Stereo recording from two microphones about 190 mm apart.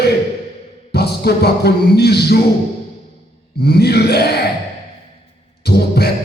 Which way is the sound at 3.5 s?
60° left (ahead or behind).